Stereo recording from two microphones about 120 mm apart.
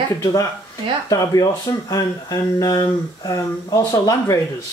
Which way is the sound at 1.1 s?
30° left (ahead or behind).